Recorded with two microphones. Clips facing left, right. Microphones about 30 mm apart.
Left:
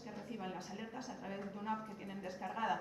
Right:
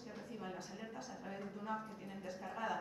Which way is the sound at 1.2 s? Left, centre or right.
Centre.